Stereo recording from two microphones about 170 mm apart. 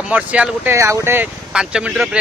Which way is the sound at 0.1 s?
10° right (ahead or behind).